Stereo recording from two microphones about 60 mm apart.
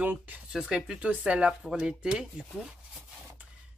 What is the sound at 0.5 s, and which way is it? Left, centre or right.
Speech, centre.